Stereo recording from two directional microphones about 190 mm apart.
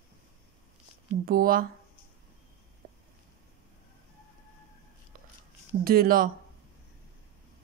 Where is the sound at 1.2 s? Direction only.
50° right (ahead or behind).